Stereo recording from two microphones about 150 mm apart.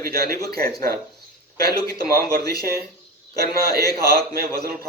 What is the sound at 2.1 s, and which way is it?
Speech, 90° right.